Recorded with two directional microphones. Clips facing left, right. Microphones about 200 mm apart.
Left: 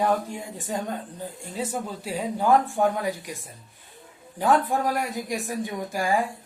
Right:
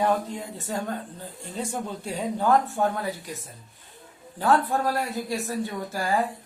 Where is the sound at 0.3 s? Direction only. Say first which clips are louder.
Even; 15° left (ahead or behind).